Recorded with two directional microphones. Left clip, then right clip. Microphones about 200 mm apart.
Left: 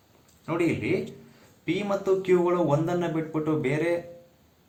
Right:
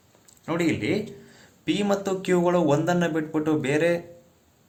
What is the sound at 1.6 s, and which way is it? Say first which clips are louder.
Speech: right 1 dB; 55° right (ahead or behind).